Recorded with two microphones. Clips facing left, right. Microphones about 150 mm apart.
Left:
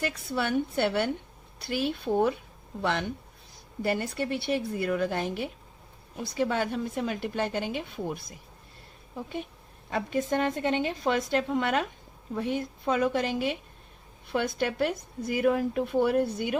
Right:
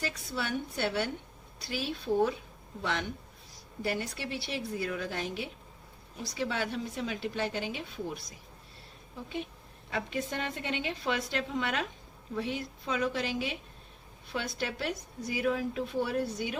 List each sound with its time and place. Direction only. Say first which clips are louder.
0.0 s speech: left 6 dB; 60° left (ahead or behind)
3.8 s a woman's voice: left 6 dB; 55° left (ahead or behind)
9.9 s a woman's voice: left 6 dB; 45° left (ahead or behind)